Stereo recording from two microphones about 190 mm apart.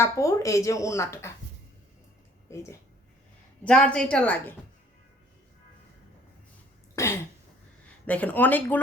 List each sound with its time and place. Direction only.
0.0 s speech: 15° left (ahead or behind)
2.5 s a woman's voice: 15° left (ahead or behind)
6.9 s cough: 15° left (ahead or behind)
8.0 s speech: 5° left (ahead or behind)